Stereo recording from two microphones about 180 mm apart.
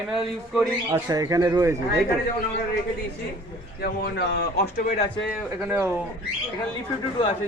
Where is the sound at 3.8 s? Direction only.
60° left (ahead or behind).